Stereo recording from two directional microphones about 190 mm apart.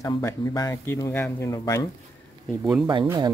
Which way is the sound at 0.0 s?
15° left (ahead or behind).